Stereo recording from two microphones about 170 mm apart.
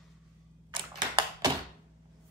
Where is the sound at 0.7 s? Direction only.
25° right (ahead or behind).